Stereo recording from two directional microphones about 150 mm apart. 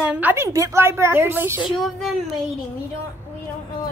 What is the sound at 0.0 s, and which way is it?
A woman's voice, 10° right (ahead or behind).